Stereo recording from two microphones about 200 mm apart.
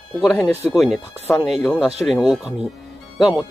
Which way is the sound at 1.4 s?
Centre (ahead or behind).